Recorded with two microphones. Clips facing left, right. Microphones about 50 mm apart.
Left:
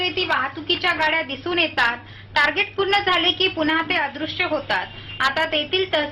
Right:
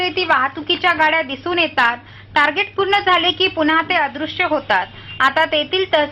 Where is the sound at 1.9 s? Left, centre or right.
Centre.